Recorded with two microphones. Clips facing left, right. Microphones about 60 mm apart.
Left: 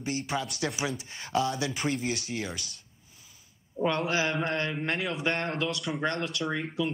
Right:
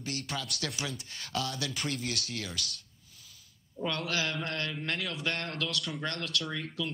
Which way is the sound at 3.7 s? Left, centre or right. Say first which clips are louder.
Left 6 dB; left.